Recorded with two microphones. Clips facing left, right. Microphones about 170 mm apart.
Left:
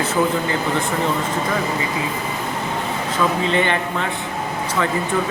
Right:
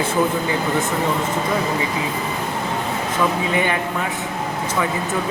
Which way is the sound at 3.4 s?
10° right (ahead or behind).